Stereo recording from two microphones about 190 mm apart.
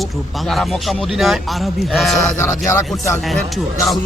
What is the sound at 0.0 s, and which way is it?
Speech, centre (ahead or behind).